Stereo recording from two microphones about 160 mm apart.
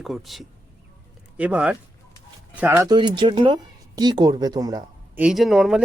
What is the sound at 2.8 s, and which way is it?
Speech, 30° right (ahead or behind).